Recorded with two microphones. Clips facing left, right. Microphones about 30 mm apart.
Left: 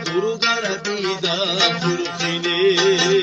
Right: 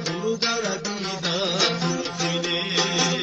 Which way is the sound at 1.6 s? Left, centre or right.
Left.